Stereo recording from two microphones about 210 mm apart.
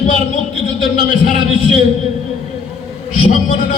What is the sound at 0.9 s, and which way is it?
Speech, 40° left (ahead or behind).